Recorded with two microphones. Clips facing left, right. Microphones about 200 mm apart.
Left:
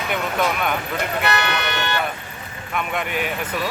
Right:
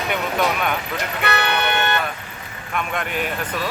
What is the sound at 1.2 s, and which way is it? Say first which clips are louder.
Vehicle: right 3 dB; 60° right (ahead or behind).